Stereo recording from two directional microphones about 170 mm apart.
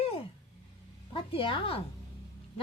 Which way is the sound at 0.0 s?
35° left (ahead or behind).